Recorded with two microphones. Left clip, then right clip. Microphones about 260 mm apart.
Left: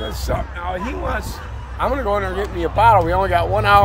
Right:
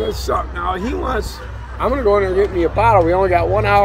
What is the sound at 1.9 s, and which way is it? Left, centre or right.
Speech, left.